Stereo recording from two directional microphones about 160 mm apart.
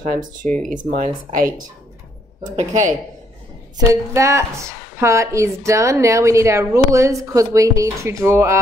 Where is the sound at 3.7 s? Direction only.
20° right (ahead or behind).